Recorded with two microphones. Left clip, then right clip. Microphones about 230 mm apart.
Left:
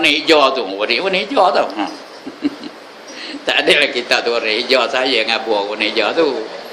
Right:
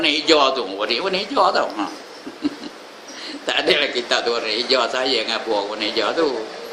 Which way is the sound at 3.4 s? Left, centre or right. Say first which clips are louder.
Left 5 dB; centre.